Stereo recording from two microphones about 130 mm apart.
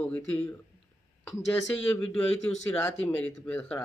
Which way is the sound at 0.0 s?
10° left (ahead or behind).